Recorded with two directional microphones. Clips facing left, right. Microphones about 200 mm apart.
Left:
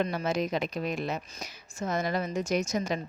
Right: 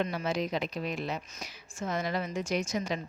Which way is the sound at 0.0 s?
45° left (ahead or behind).